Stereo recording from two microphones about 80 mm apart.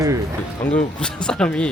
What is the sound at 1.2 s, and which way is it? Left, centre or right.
Speech, centre.